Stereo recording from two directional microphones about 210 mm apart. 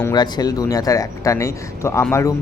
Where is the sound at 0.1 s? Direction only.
20° left (ahead or behind).